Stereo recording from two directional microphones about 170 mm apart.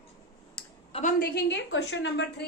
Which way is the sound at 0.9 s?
40° left (ahead or behind).